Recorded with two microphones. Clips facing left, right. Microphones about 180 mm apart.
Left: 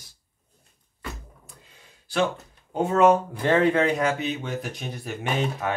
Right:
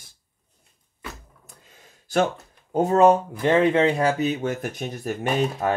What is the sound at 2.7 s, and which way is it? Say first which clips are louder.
Speech: right 2 dB; 35° right (ahead or behind).